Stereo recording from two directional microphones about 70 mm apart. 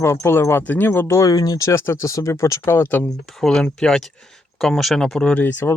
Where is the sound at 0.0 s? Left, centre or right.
Left.